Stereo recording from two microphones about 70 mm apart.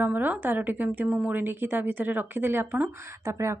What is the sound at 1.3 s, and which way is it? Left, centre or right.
A woman's voice, right.